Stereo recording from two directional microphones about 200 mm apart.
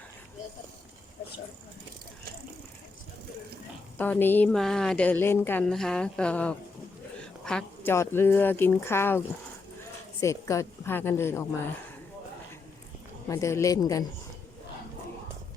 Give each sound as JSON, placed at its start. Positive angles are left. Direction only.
{"t": 3.9, "sound": "a woman's voice", "side_deg": 10}
{"t": 13.2, "sound": "a woman's voice", "side_deg": 15}